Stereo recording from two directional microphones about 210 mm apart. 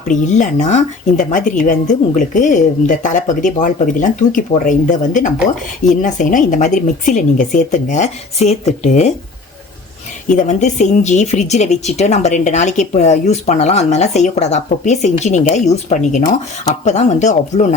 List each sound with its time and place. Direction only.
0.1 s speech: 35° left (ahead or behind)
10.2 s speech: 35° left (ahead or behind)